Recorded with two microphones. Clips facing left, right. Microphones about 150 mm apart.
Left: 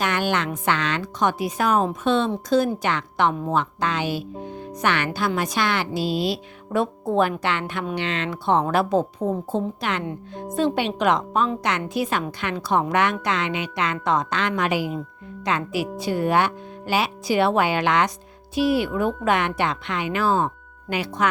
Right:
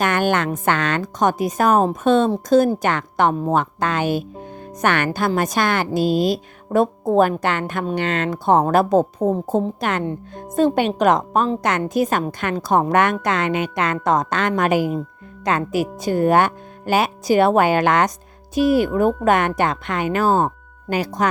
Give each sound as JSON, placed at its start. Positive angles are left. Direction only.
{"t": 0.0, "sound": "speech", "side_deg": -50}